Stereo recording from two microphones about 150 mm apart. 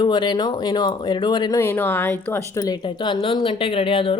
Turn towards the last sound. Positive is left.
turn(degrees=35)  # may be behind; listen again after turning